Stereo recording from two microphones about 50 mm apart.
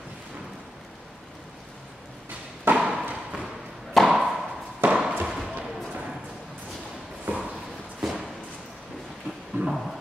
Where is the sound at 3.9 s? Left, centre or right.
Centre.